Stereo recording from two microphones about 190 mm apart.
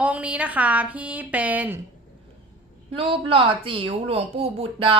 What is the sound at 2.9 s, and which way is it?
Speech, 30° right (ahead or behind).